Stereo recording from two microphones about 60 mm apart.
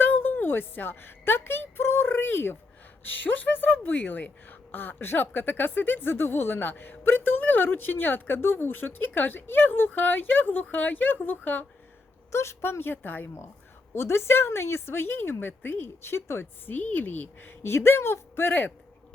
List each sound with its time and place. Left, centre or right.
0.0 s a woman's voice: left
12.3 s a woman's voice: left
13.9 s a woman's voice: left
17.6 s speech: left